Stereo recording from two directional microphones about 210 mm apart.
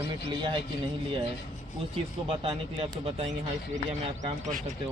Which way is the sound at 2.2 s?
25° right (ahead or behind).